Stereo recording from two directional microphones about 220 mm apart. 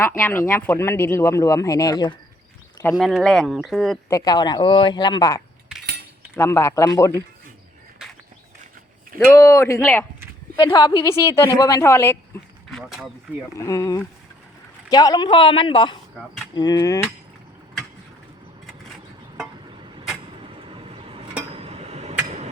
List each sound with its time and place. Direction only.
0.0 s speech: 10° left (ahead or behind)
2.7 s a sound: 15° left (ahead or behind)
3.0 s speech: centre (ahead or behind)
4.1 s speech: 15° left (ahead or behind)
9.1 s speech: 15° left (ahead or behind)
10.6 s speech: 20° left (ahead or behind)
12.7 s speech: centre (ahead or behind)
13.5 s speech: 15° left (ahead or behind)
20.7 s vehicle: 25° right (ahead or behind)
21.5 s a sound: 25° right (ahead or behind)